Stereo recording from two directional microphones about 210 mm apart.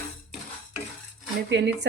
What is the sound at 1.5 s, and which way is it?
Speech, 55° right (ahead or behind).